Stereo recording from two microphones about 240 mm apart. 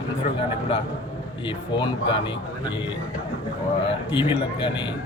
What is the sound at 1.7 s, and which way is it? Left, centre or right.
Speech, left.